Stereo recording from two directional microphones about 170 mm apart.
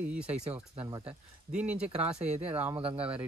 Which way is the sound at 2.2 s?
40° right (ahead or behind).